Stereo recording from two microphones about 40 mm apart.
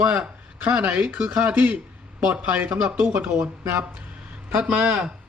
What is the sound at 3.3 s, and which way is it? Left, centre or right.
Speech, right.